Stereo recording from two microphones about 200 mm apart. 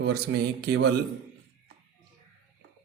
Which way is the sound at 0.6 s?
60° right (ahead or behind).